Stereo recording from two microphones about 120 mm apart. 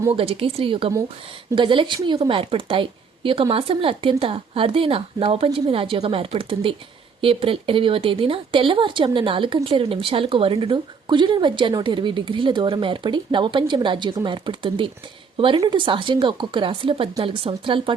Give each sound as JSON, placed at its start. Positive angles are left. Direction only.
{"t": 0.1, "sound": "a woman's voice", "side_deg": -50}